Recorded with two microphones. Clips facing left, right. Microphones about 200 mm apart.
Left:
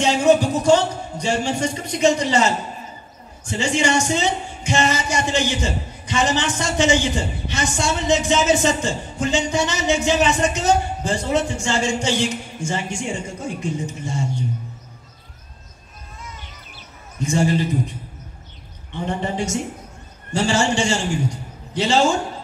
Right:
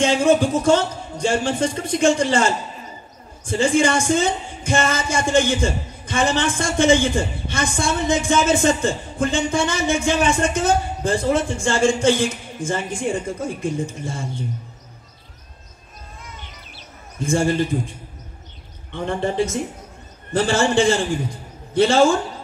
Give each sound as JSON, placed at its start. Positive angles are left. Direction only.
{"t": 0.0, "sound": "a man's voice", "side_deg": -50}
{"t": 17.2, "sound": "speech", "side_deg": -50}
{"t": 18.9, "sound": "speech", "side_deg": -55}
{"t": 20.3, "sound": "speech", "side_deg": -55}